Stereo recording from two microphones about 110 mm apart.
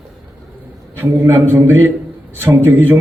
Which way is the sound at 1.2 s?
20° right (ahead or behind).